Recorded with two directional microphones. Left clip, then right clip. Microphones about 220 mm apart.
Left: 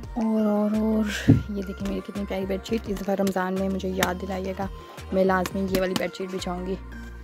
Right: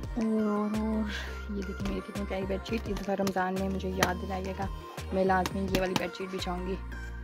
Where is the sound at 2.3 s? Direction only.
20° left (ahead or behind).